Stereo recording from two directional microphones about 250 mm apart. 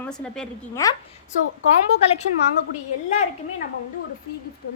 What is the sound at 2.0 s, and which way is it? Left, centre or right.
Speech, left.